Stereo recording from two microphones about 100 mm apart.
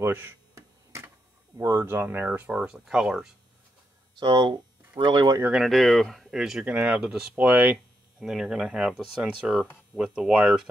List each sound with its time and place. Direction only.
0.0 s a sound: 25° right (ahead or behind)
1.6 s speech: 30° right (ahead or behind); by 3.3 s 5° right (ahead or behind)
4.2 s speech: 45° right (ahead or behind)
5.6 s speech: centre (ahead or behind)
6.6 s speech: 15° right (ahead or behind)